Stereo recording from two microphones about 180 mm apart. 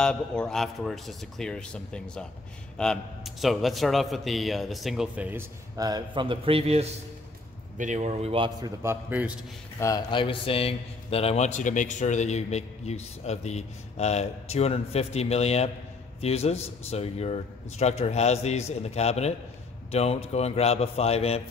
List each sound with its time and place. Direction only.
0.0 s a man's voice: 5° left (ahead or behind)
5.8 s a man's voice: 20° right (ahead or behind)
8.5 s a man's voice: 20° right (ahead or behind)
9.8 s a man's voice: 20° left (ahead or behind)